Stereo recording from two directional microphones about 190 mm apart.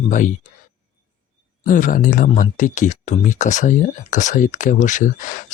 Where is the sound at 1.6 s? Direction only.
45° left (ahead or behind).